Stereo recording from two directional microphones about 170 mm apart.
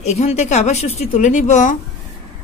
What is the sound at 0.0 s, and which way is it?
A woman's voice, 40° left (ahead or behind).